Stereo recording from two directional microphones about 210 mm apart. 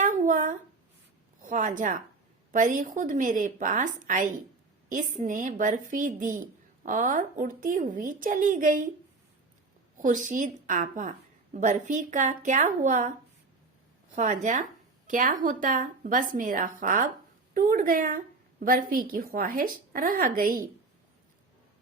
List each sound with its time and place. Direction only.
0.0 s a sound: 40° right (ahead or behind)
1.4 s a woman's voice: 40° right (ahead or behind)
10.0 s a woman's voice: 35° right (ahead or behind)
14.2 s a woman's voice: 35° right (ahead or behind)